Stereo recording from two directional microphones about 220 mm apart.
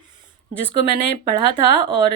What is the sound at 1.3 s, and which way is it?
Speech, 25° right (ahead or behind).